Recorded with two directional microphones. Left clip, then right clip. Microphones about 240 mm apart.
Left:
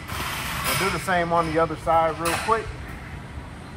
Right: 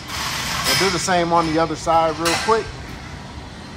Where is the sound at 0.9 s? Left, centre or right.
Centre.